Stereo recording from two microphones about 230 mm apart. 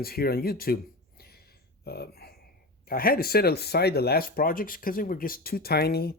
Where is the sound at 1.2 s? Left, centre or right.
Left.